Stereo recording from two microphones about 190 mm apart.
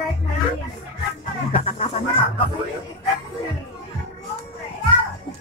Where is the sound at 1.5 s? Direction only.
30° left (ahead or behind).